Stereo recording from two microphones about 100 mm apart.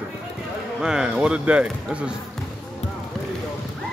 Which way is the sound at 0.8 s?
5° right (ahead or behind).